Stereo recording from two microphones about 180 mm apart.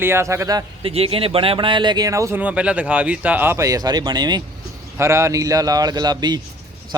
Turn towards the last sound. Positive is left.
turn(degrees=-20)  # may be behind; listen again after turning